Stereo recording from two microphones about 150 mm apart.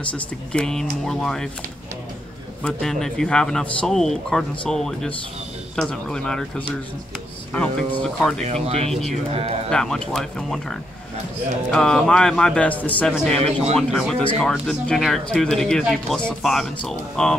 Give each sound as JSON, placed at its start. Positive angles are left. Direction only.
{"t": 0.0, "sound": "speech", "side_deg": 5}
{"t": 2.6, "sound": "speech", "side_deg": 5}
{"t": 8.6, "sound": "speech", "side_deg": -40}
{"t": 9.7, "sound": "speech", "side_deg": 5}
{"t": 13.1, "sound": "speech", "side_deg": 0}